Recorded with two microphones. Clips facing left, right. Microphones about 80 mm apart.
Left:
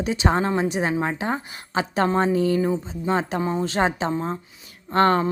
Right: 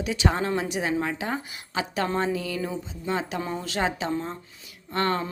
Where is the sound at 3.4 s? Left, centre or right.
Left.